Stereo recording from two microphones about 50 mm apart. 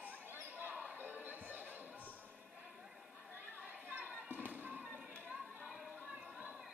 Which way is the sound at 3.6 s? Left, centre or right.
Right.